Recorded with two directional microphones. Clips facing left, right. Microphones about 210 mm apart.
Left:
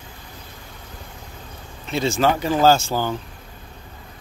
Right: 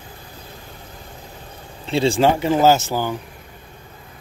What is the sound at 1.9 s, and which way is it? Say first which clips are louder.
Speech: right 3 dB; 30° right (ahead or behind).